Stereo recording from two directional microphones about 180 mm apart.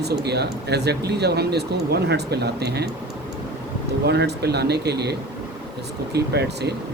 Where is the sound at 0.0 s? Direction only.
65° right (ahead or behind).